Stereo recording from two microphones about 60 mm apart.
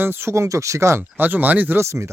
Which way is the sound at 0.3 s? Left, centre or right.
Right.